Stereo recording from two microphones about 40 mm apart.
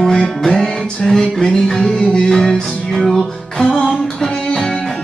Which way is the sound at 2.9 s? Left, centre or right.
Centre.